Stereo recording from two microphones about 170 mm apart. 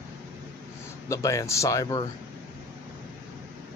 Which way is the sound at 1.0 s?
20° left (ahead or behind).